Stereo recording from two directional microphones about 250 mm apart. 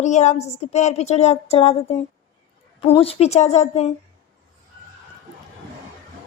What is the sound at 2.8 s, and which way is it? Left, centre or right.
A woman's voice, left.